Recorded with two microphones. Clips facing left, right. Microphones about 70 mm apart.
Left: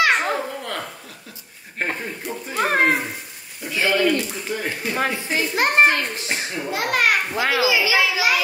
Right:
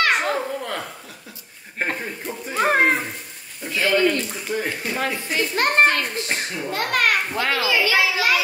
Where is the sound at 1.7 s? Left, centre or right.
Centre.